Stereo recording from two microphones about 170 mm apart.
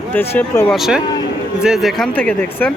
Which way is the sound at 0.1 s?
10° left (ahead or behind).